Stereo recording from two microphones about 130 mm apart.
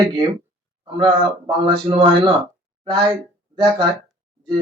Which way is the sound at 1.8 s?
50° right (ahead or behind).